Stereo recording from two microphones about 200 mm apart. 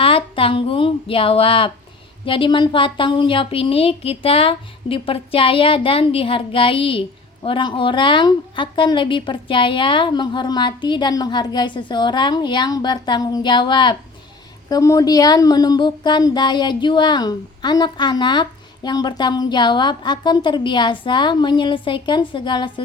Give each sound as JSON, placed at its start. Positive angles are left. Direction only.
{"t": 0.0, "sound": "a woman's voice", "side_deg": 25}